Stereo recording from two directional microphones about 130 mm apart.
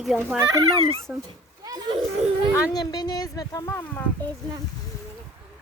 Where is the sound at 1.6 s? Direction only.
30° right (ahead or behind).